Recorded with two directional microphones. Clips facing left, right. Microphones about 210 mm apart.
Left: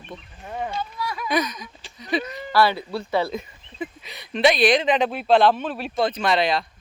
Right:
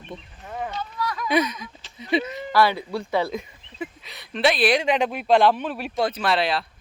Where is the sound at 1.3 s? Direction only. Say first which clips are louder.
Right 2 dB; 25° right (ahead or behind).